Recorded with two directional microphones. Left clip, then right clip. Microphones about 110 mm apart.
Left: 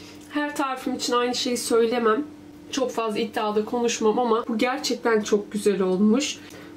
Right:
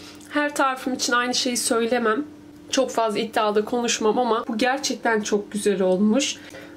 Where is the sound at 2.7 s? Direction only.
40° right (ahead or behind).